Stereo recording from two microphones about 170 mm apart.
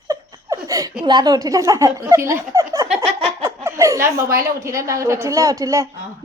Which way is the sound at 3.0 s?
35° right (ahead or behind).